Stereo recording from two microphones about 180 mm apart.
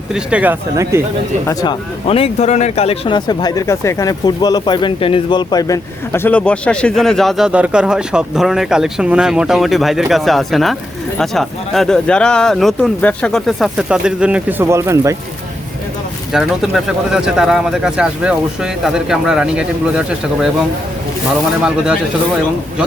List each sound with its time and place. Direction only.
0.1 s speech: 5° right (ahead or behind)
2.0 s speech: 35° left (ahead or behind); by 15.1 s 15° right (ahead or behind)
16.3 s speech: centre (ahead or behind)